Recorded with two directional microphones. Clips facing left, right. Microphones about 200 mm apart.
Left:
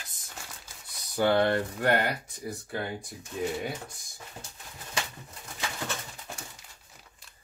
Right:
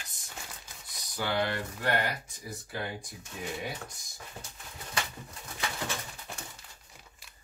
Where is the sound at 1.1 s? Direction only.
55° left (ahead or behind).